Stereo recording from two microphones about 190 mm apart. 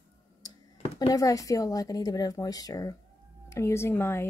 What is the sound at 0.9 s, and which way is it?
Speech, 20° left (ahead or behind).